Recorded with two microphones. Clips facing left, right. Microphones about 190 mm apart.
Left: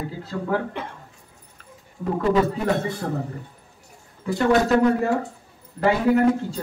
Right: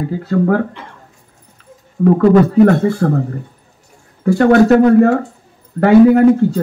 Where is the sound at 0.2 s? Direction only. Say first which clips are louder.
Right 12 dB; 60° right (ahead or behind).